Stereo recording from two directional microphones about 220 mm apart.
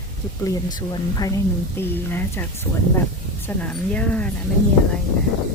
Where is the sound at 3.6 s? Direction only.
5° left (ahead or behind).